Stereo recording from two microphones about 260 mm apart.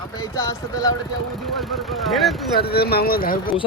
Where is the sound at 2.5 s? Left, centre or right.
Left.